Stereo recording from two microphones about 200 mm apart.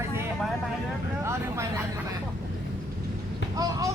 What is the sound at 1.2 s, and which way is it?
Speech, 15° right (ahead or behind).